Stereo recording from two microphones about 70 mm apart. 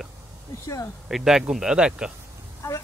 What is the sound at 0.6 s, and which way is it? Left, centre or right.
Speech, left.